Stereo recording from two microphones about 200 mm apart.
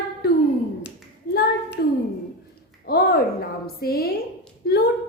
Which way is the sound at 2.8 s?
50° left (ahead or behind).